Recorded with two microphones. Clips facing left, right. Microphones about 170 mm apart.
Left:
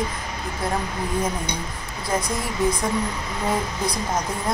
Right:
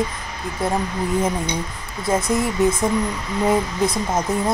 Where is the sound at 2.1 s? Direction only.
25° right (ahead or behind).